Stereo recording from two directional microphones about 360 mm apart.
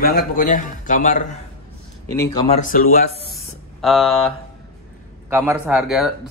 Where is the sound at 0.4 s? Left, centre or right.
Left.